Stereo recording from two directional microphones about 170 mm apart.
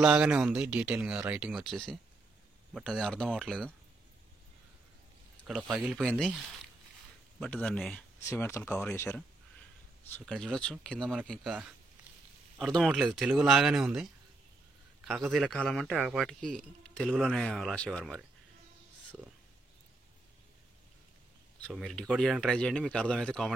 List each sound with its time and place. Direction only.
0.0 s speech: 5° right (ahead or behind)
5.5 s speech: 5° right (ahead or behind)
8.3 s speech: 15° left (ahead or behind)
10.2 s speech: 5° left (ahead or behind)
15.0 s speech: centre (ahead or behind)
17.5 s speech: 5° left (ahead or behind)
21.6 s speech: 5° left (ahead or behind)